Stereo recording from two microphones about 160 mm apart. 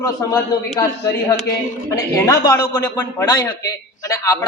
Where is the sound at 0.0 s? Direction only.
20° left (ahead or behind).